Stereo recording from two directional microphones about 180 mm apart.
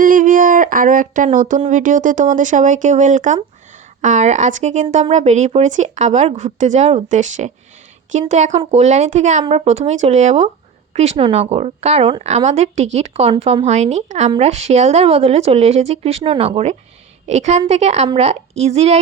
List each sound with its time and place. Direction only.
0.0 s speech: 50° right (ahead or behind)